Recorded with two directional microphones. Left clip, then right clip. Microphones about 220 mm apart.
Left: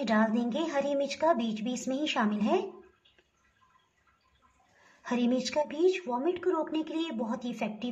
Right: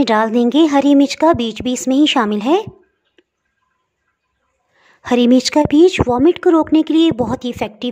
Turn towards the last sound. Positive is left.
turn(degrees=-50)  # may be behind; listen again after turning